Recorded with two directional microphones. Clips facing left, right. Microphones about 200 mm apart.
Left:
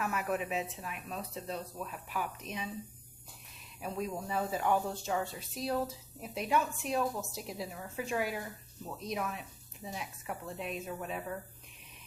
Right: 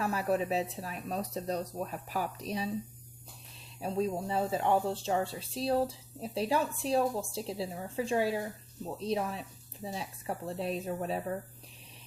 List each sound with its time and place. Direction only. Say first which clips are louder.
0.0 s speech: right 4 dB; 30° right (ahead or behind)
3.8 s speech: right 5 dB; 30° right (ahead or behind)